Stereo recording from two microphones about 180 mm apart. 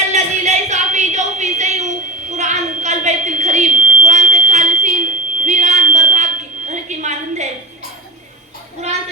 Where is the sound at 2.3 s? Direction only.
40° right (ahead or behind).